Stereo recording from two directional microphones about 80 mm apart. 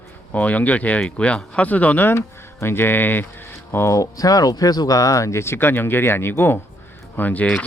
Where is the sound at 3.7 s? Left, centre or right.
Left; by 7.6 s centre.